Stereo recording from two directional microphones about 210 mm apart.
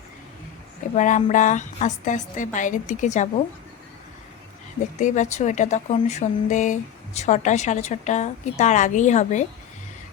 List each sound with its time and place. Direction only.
0.9 s speech: 35° left (ahead or behind)
4.9 s speech: 35° left (ahead or behind)